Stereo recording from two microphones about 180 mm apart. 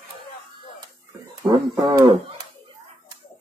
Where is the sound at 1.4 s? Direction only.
25° right (ahead or behind).